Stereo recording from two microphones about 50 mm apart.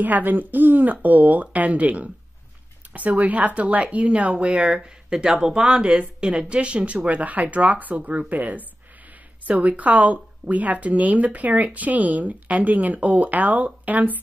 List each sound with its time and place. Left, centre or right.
0.0 s a woman's voice: right